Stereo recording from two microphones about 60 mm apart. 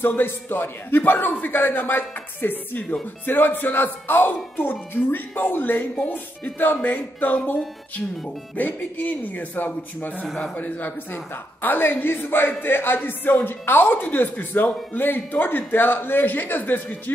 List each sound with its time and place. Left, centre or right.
0.0 s a man's voice: left
8.5 s a man's voice: left